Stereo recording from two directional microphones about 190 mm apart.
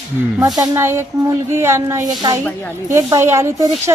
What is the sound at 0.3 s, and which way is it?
Speech, 20° right (ahead or behind).